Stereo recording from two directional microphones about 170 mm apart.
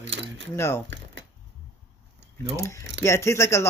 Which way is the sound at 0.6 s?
15° left (ahead or behind).